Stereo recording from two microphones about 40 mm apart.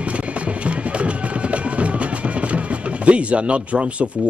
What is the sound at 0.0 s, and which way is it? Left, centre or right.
Music, right.